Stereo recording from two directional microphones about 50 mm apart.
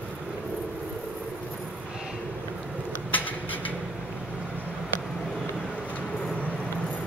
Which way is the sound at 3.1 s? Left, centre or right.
Left.